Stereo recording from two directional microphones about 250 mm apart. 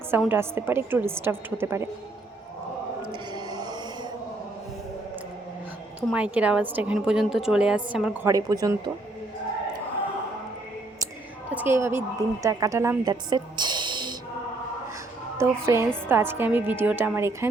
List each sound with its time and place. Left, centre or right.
0.1 s a woman's voice: centre
3.3 s a sound: centre
6.1 s a woman's voice: centre
11.5 s a woman's voice: centre
15.4 s a woman's voice: centre